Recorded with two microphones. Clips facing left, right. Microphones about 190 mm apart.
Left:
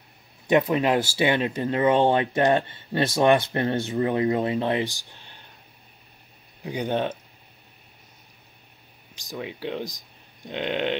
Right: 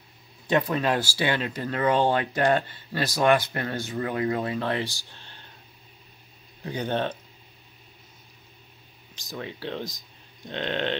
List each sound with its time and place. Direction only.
0.5 s speech: 20° left (ahead or behind)
6.6 s speech: 15° left (ahead or behind)
9.1 s speech: 10° left (ahead or behind)